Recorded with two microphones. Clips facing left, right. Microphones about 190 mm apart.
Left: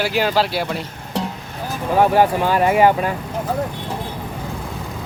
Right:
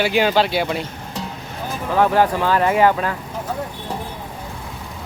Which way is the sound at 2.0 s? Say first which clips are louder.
Left 1 dB; 10° left (ahead or behind).